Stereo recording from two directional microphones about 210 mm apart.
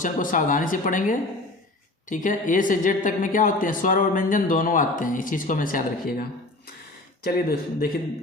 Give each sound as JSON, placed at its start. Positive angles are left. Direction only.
{"t": 0.0, "sound": "a woman's voice", "side_deg": 40}
{"t": 7.3, "sound": "speech", "side_deg": 45}